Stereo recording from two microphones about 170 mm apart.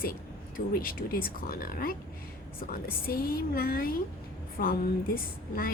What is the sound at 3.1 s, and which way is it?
A woman's voice, 60° left (ahead or behind).